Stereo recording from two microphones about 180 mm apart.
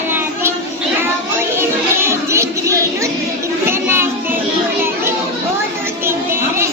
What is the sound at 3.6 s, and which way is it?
Children playing, 15° right (ahead or behind).